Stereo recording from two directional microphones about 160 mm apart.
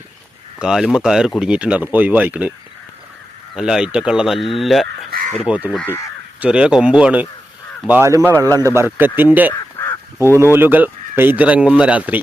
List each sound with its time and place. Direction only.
0.6 s speech: centre (ahead or behind)
3.5 s speech: 5° right (ahead or behind)
5.7 s speech: 10° left (ahead or behind)
6.4 s speech: 5° right (ahead or behind)
9.5 s crow: 20° left (ahead or behind)
10.3 s speech: 15° right (ahead or behind)